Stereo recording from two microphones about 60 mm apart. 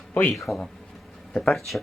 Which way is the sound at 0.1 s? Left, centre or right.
Left.